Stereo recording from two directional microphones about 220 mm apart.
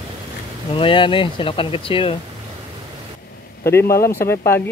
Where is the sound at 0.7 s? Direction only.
20° left (ahead or behind).